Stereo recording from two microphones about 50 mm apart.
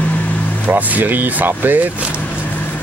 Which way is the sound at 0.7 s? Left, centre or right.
Right.